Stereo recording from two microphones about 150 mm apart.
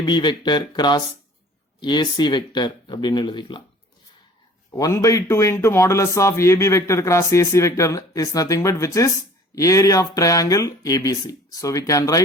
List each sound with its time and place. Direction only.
0.0 s a man's voice: 30° left (ahead or behind)
4.7 s a man's voice: 20° left (ahead or behind)